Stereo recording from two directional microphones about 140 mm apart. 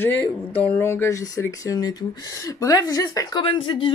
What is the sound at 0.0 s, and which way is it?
Speech, 15° left (ahead or behind).